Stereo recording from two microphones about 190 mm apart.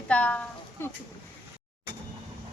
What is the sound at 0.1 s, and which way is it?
Speech, 5° left (ahead or behind).